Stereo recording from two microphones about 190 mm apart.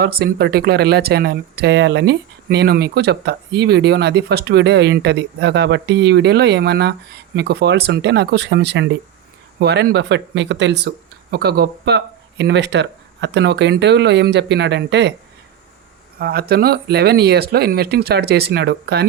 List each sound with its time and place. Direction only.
0.0 s speech: 55° right (ahead or behind)
16.1 s speech: 55° right (ahead or behind)